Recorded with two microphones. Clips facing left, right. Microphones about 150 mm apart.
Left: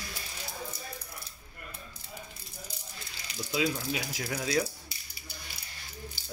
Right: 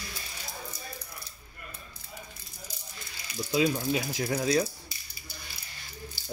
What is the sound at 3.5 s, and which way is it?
Speech, 25° right (ahead or behind).